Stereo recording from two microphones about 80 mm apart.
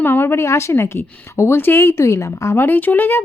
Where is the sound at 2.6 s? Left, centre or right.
Left.